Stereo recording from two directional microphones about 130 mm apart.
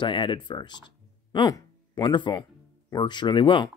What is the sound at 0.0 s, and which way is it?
Speech, 40° left (ahead or behind).